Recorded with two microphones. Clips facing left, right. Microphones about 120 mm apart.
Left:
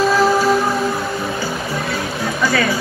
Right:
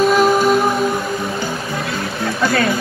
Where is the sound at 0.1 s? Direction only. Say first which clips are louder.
Right 1 dB; 20° right (ahead or behind).